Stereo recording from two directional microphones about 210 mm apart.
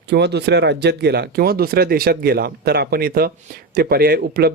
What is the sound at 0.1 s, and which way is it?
Speech, 55° right (ahead or behind).